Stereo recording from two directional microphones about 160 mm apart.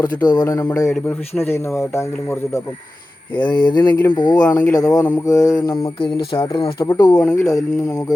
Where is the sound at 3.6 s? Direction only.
25° left (ahead or behind).